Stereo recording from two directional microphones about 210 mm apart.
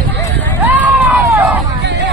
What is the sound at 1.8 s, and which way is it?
Hubbub, 55° right (ahead or behind).